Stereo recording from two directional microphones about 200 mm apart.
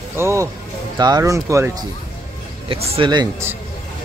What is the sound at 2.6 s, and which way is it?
Speech, 30° right (ahead or behind).